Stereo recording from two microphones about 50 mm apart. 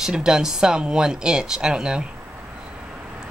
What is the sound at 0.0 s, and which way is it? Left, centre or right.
A woman's voice, centre.